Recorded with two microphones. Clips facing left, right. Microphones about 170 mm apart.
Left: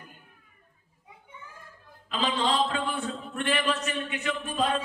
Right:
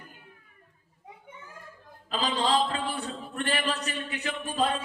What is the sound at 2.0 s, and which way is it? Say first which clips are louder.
A man's voice: even; 35° right (ahead or behind).